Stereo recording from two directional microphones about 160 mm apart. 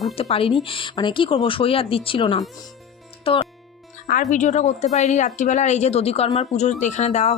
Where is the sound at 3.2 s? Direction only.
35° left (ahead or behind).